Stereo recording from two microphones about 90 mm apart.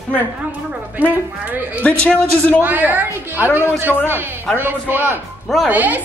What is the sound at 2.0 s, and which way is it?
Speech, 10° left (ahead or behind).